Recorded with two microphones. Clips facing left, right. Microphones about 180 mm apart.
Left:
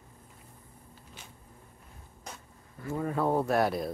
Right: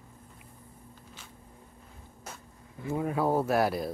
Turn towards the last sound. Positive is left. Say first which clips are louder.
# even
turn(degrees=0)  # may be behind; listen again after turning